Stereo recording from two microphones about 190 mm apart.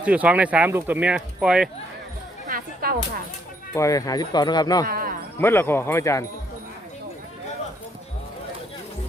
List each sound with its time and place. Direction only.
0.0 s speech: 5° right (ahead or behind)
2.8 s speech: 50° right (ahead or behind)
3.8 s speech: 15° left (ahead or behind)
4.9 s a man's voice: 50° right (ahead or behind)
5.4 s speech: 10° left (ahead or behind)